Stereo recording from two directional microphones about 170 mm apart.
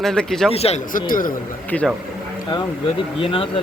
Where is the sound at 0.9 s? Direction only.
55° left (ahead or behind).